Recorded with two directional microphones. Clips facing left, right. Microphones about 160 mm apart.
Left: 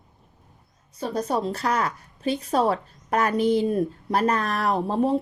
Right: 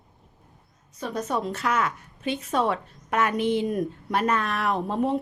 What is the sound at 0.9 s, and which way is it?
A woman's voice, 30° left (ahead or behind).